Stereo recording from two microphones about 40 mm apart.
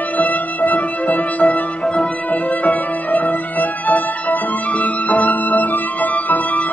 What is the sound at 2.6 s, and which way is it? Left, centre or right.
Music, left.